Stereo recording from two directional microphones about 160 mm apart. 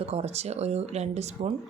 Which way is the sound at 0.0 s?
40° right (ahead or behind).